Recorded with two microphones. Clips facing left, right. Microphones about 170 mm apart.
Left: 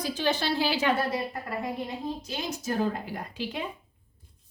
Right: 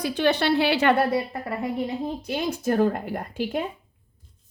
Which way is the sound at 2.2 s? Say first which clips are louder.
Right 8 dB; 55° right (ahead or behind).